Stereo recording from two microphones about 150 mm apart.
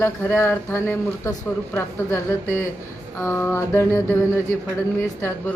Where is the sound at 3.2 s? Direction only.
15° left (ahead or behind).